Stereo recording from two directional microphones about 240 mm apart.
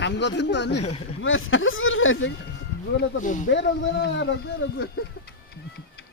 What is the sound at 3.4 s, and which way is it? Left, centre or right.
Speech, left.